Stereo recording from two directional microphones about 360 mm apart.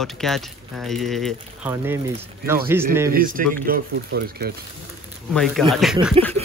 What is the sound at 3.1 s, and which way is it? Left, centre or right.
Speech, right.